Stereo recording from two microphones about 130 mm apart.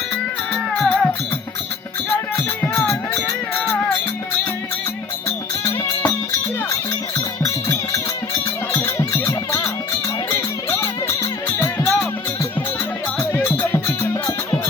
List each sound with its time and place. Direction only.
0.5 s music: 5° left (ahead or behind)
2.8 s music: 10° left (ahead or behind)
7.4 s music: 20° left (ahead or behind)
13.1 s music: 15° left (ahead or behind)